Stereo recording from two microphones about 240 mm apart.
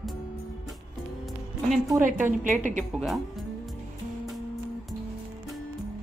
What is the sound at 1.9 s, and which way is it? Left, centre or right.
Speech, centre.